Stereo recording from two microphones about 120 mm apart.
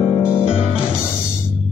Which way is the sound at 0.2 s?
20° left (ahead or behind).